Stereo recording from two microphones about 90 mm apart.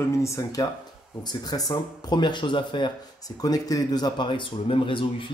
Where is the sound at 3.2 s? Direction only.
45° left (ahead or behind); by 5.3 s 75° left (ahead or behind).